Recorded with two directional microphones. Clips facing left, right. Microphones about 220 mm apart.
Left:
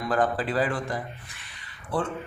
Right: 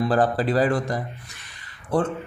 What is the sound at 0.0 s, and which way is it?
Speech, 35° right (ahead or behind).